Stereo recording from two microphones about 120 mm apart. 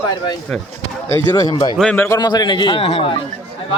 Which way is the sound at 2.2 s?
35° left (ahead or behind).